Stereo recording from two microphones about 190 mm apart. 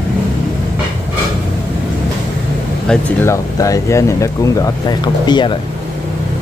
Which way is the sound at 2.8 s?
10° left (ahead or behind).